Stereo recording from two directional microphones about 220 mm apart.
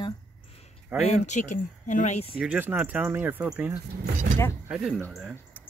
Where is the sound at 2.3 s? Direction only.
5° right (ahead or behind).